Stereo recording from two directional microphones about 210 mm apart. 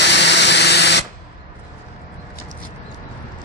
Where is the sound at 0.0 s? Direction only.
55° left (ahead or behind).